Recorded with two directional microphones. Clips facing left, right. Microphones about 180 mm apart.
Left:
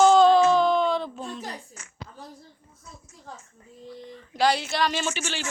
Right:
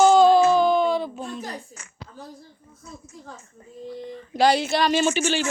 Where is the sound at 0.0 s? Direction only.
5° right (ahead or behind).